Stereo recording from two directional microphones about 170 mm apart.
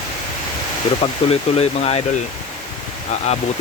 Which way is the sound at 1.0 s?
35° left (ahead or behind).